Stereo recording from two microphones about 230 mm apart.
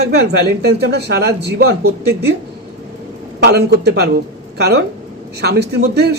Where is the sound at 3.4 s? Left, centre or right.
Right.